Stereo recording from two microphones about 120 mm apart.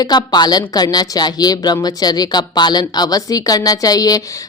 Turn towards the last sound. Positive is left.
turn(degrees=30)  # may be behind; listen again after turning